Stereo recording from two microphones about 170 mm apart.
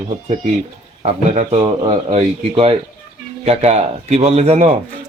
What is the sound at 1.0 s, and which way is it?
Speech, 40° right (ahead or behind).